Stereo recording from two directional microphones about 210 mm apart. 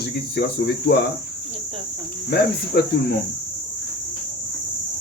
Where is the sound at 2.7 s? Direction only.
45° left (ahead or behind).